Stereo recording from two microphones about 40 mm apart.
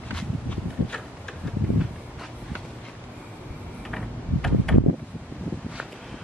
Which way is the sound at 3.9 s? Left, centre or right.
Centre.